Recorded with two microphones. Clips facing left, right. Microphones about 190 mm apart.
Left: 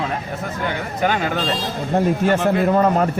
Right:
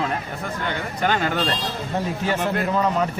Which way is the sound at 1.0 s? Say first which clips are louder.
Left 2 dB; 5° left (ahead or behind).